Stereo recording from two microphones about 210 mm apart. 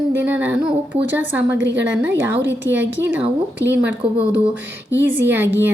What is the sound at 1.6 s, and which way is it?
Speech, 55° right (ahead or behind).